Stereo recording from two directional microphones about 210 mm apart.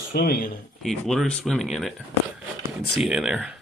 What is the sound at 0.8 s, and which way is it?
Speech, centre (ahead or behind).